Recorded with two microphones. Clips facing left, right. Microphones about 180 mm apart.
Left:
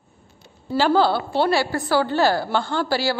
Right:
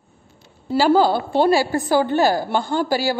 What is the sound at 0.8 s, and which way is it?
A woman's voice, 10° right (ahead or behind).